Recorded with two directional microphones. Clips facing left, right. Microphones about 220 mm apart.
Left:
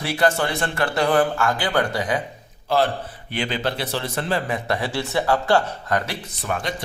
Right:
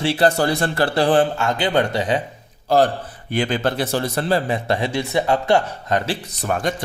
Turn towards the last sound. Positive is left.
turn(degrees=-45)  # may be behind; listen again after turning